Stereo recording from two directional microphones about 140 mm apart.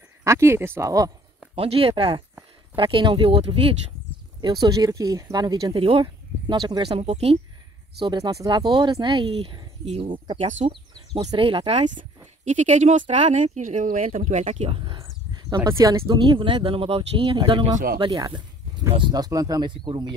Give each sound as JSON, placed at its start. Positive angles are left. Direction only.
{"t": 0.2, "sound": "speech", "side_deg": -20}
{"t": 1.5, "sound": "speech", "side_deg": -45}
{"t": 4.4, "sound": "speech", "side_deg": -30}
{"t": 6.9, "sound": "speech", "side_deg": -45}
{"t": 8.0, "sound": "speech", "side_deg": -30}
{"t": 11.9, "sound": "speech", "side_deg": -60}